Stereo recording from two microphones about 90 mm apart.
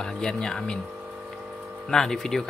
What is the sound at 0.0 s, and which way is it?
Speech, 10° left (ahead or behind).